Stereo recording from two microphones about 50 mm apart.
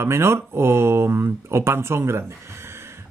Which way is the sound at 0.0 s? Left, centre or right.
Right.